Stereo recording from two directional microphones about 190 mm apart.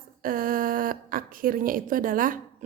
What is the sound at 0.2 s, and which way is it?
A woman's voice, 50° right (ahead or behind).